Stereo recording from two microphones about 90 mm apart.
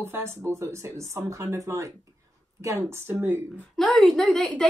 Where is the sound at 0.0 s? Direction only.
30° right (ahead or behind).